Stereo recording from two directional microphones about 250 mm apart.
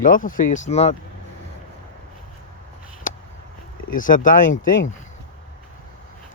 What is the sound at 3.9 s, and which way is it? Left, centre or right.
Speech, left.